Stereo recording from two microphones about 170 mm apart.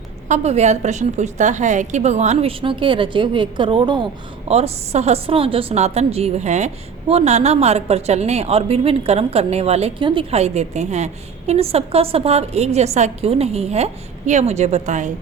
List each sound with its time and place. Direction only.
0.3 s a woman's voice: 40° right (ahead or behind)